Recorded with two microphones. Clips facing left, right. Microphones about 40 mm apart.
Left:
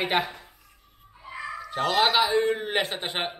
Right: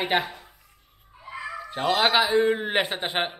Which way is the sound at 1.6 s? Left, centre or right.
Centre.